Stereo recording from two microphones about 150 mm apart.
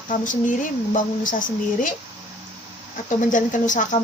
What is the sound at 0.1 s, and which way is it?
Speech, 60° left (ahead or behind).